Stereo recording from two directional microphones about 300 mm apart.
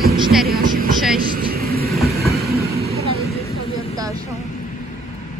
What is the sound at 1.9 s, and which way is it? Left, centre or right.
Train, centre.